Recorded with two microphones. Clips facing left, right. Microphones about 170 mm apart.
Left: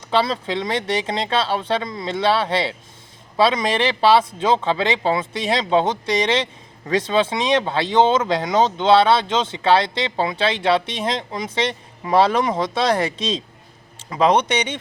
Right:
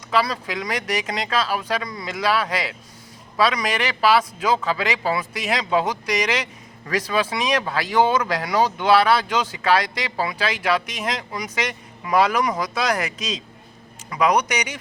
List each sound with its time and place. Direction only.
0.1 s a man's voice: 25° left (ahead or behind)